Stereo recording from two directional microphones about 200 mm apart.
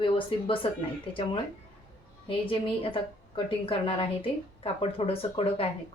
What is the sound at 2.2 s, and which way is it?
A woman's voice, 25° left (ahead or behind).